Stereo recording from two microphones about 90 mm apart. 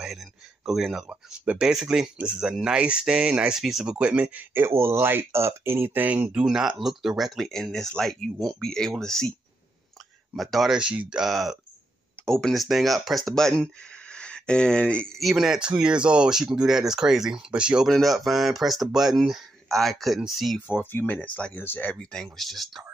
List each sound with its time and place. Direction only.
0.0 s speech: 5° right (ahead or behind)
10.3 s speech: centre (ahead or behind)
15.1 s speech: centre (ahead or behind)
17.8 s speech: centre (ahead or behind)
20.6 s speech: 20° left (ahead or behind)
22.1 s speech: centre (ahead or behind)